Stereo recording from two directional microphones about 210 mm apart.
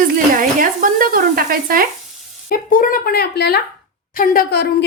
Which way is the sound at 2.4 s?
40° left (ahead or behind).